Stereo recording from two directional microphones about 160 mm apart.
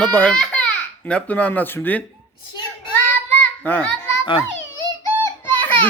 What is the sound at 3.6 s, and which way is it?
Speech, 10° left (ahead or behind).